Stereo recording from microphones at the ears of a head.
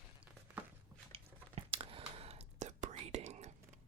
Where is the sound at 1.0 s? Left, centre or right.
Right.